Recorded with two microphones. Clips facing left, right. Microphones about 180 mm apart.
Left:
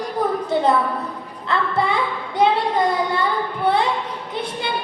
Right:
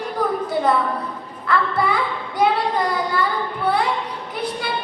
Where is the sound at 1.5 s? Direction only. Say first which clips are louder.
Right 1 dB; 25° left (ahead or behind).